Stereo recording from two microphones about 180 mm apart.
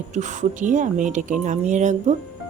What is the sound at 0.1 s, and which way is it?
A woman's voice, 40° right (ahead or behind).